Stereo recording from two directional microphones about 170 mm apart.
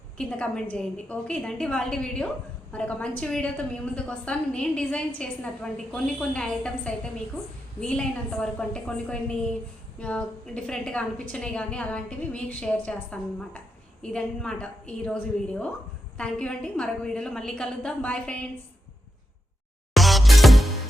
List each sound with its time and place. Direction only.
0.2 s a woman's voice: 5° left (ahead or behind)
19.9 s music: centre (ahead or behind)